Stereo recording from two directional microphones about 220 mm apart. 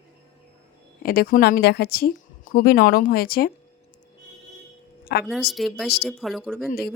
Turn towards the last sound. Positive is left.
turn(degrees=0)  # may be behind; listen again after turning